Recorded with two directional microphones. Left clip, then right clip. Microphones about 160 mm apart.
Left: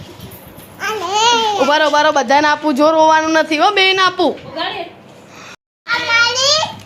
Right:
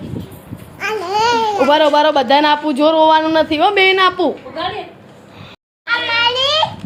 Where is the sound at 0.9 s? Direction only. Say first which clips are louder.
Left 1 dB; 20° right (ahead or behind).